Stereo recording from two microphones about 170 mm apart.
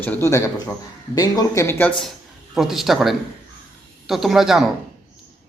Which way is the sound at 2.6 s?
Centre (ahead or behind).